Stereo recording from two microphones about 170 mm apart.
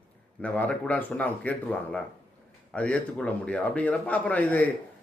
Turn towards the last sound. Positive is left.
turn(degrees=10)  # may be behind; listen again after turning